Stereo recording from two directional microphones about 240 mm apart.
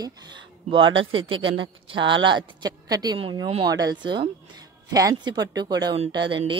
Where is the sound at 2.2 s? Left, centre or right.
Centre.